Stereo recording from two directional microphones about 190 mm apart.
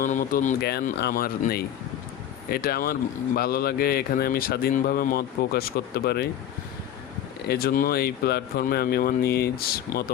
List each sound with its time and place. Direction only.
0.0 s a man's voice: 45° left (ahead or behind)
7.4 s speech: 55° left (ahead or behind)